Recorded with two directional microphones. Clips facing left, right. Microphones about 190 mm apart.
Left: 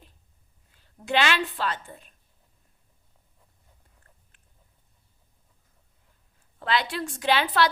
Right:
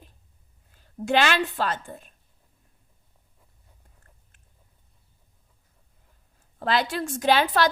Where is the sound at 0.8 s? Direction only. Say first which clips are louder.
Right 3 dB; 45° right (ahead or behind).